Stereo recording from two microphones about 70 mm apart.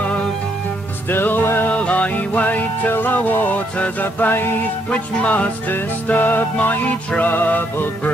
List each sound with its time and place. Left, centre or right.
1.1 s music: left
1.7 s music: centre
4.9 s music: centre